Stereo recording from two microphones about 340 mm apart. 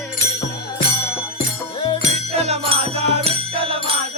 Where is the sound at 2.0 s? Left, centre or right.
Centre.